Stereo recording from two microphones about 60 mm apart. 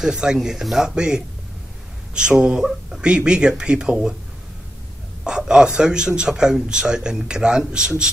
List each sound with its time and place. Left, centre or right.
0.0 s a man's voice: centre
5.2 s a man's voice: centre